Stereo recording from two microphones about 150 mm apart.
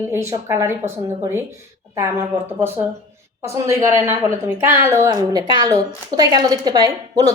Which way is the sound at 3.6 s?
20° right (ahead or behind).